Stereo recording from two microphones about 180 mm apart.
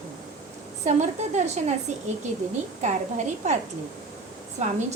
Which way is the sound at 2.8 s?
40° right (ahead or behind).